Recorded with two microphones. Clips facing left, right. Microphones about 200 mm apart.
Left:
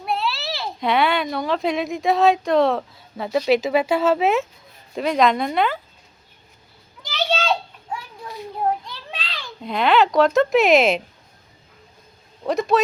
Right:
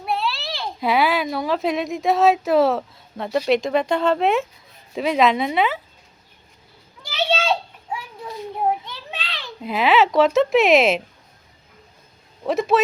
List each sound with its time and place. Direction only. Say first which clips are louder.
0.0 s a child's voice: even; centre (ahead or behind)
7.1 s children playing: right 1 dB; 5° right (ahead or behind)
9.6 s speech: even; 5° right (ahead or behind)
12.5 s speech: even; centre (ahead or behind)